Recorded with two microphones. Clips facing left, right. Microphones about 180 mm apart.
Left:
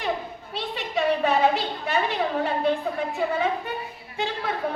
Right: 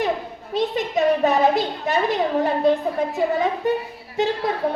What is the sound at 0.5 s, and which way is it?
A woman's voice, 40° right (ahead or behind).